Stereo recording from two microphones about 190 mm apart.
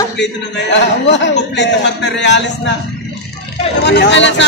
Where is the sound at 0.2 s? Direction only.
70° left (ahead or behind).